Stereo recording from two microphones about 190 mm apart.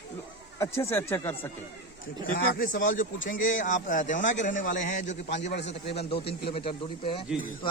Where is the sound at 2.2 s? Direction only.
45° left (ahead or behind).